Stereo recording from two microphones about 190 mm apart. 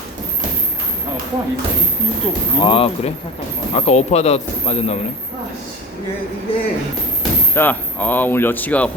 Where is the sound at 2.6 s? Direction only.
25° left (ahead or behind).